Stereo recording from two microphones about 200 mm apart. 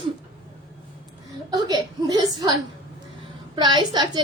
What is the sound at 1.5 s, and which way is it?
Speech, 20° right (ahead or behind).